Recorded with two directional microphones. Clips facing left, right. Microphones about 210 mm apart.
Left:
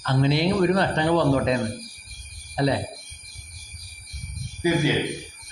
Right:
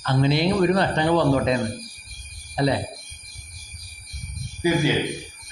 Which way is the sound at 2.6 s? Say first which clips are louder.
Right 1 dB; 15° right (ahead or behind).